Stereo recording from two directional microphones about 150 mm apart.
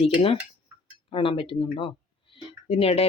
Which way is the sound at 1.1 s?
35° left (ahead or behind).